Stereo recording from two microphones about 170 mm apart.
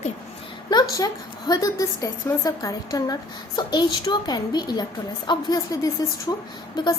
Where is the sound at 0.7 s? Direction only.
20° left (ahead or behind).